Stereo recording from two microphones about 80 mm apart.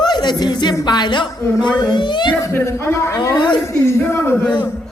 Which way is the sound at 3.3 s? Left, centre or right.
Left.